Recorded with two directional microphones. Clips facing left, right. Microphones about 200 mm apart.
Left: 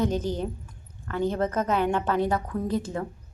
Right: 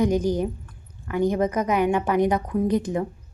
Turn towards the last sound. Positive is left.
turn(degrees=-15)  # may be behind; listen again after turning